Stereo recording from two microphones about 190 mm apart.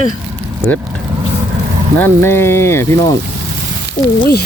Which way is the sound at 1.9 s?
10° left (ahead or behind).